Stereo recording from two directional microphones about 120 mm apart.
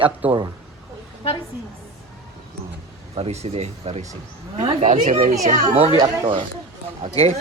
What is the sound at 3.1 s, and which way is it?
Speech, 60° right (ahead or behind).